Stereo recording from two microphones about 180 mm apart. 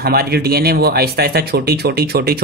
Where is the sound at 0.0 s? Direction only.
60° right (ahead or behind).